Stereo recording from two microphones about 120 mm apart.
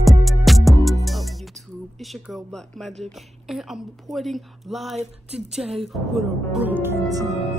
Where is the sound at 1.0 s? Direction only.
Centre (ahead or behind).